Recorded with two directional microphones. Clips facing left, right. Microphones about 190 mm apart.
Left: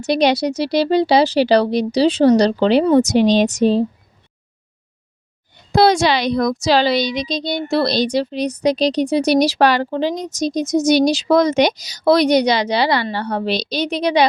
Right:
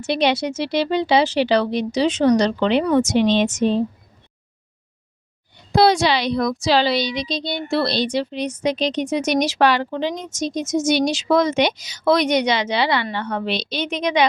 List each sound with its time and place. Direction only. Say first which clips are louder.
0.0 s a woman's voice: left 4 dB; 40° left (ahead or behind)
5.5 s a woman's voice: left 2 dB; 45° left (ahead or behind)